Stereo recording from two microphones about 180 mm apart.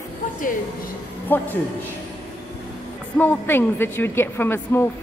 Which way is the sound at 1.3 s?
10° left (ahead or behind).